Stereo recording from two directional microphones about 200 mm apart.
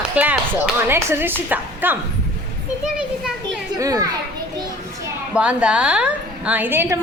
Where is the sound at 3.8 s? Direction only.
15° right (ahead or behind).